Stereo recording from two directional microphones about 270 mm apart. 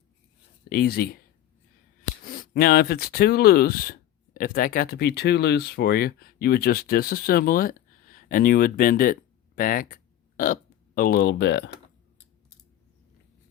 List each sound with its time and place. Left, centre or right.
0.7 s speech: left
2.2 s speech: left